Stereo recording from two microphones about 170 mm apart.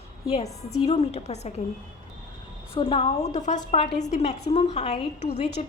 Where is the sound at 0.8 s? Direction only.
40° left (ahead or behind).